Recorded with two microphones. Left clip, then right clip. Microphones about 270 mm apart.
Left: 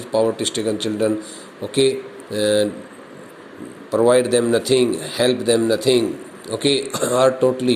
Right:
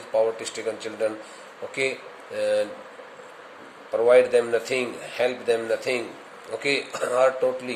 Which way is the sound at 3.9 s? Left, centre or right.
Left.